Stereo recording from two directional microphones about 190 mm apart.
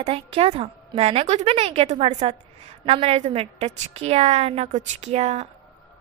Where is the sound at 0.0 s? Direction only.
30° right (ahead or behind).